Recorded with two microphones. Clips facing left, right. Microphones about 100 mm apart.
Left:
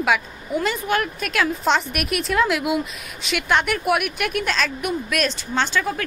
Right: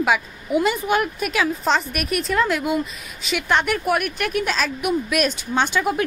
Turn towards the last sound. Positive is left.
turn(degrees=-15)  # may be behind; listen again after turning